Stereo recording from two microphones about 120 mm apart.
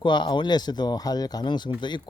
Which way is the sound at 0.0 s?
40° left (ahead or behind).